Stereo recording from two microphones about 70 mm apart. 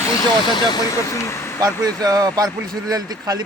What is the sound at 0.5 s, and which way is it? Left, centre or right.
Speech, left.